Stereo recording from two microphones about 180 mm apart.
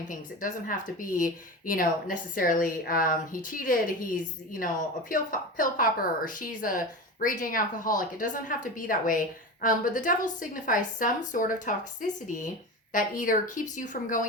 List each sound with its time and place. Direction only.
0.1 s speech: 50° left (ahead or behind)